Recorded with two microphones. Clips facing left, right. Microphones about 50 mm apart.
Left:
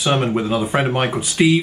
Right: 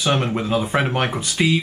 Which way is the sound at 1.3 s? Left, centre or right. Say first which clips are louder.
Left 5 dB; left.